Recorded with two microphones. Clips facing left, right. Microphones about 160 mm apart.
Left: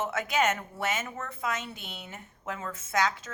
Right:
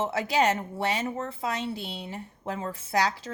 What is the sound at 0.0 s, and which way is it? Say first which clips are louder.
A woman's voice: right 3 dB; 30° right (ahead or behind).